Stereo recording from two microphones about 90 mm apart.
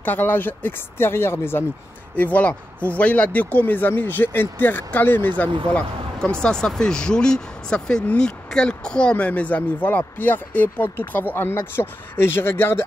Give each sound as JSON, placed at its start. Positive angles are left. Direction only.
{"t": 0.0, "sound": "speech", "side_deg": 20}